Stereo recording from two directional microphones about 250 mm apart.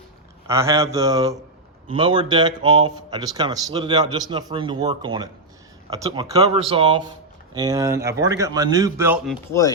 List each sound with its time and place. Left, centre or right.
0.4 s speech: centre
9.5 s speech: centre